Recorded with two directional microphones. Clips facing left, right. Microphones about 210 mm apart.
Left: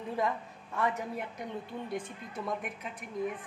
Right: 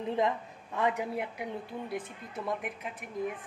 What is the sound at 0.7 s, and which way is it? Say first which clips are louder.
A woman's voice: right 2 dB; 15° right (ahead or behind).